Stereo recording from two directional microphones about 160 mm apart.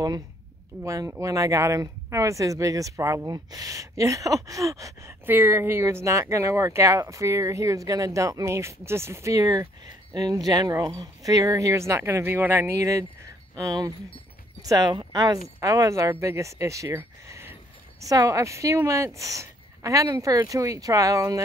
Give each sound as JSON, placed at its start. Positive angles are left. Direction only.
{"t": 0.8, "sound": "speech", "side_deg": -20}